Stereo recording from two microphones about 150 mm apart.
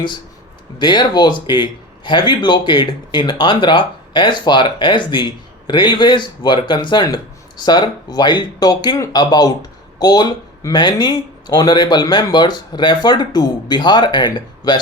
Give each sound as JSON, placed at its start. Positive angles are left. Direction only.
{"t": 0.8, "sound": "speech", "side_deg": 30}